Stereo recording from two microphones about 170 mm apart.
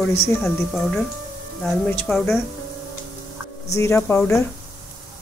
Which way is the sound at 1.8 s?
5° left (ahead or behind).